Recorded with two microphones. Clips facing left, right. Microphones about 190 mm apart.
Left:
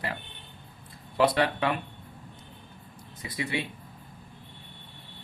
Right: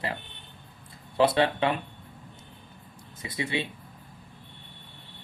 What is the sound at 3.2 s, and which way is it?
Speech, 25° right (ahead or behind).